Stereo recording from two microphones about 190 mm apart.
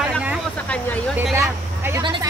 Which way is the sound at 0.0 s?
5° right (ahead or behind).